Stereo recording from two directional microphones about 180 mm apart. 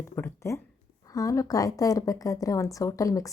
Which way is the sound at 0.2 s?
15° left (ahead or behind).